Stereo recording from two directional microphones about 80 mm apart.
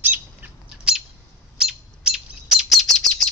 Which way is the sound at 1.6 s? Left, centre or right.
Centre.